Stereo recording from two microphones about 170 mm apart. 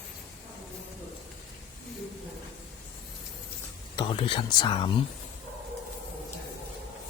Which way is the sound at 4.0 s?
30° left (ahead or behind).